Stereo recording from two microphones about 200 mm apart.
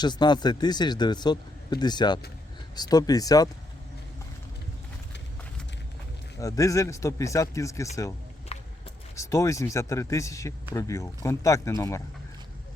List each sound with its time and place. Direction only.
0.0 s a man's voice: 20° left (ahead or behind)
6.4 s a man's voice: 15° left (ahead or behind)
8.5 s a sound: 30° left (ahead or behind)
9.1 s a man's voice: 15° left (ahead or behind)